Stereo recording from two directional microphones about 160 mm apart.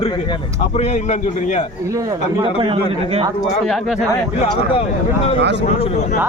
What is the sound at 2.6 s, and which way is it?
Speech, 35° right (ahead or behind).